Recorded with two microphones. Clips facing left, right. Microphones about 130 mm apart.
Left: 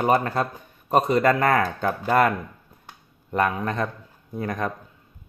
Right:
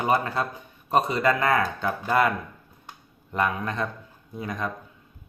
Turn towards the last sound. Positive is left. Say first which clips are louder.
# left 4 dB
turn(degrees=55)  # may be behind; listen again after turning